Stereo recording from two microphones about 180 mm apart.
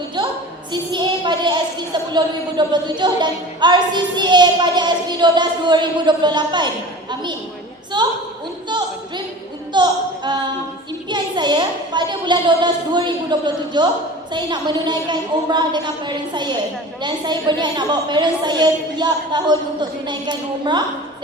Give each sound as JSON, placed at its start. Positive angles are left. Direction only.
{"t": 0.2, "sound": "a sound", "side_deg": -25}
{"t": 0.7, "sound": "a woman's voice", "side_deg": -25}
{"t": 7.9, "sound": "a woman's voice", "side_deg": -25}
{"t": 9.7, "sound": "a woman's voice", "side_deg": -25}